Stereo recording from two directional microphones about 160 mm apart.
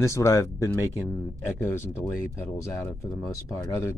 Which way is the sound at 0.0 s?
20° left (ahead or behind).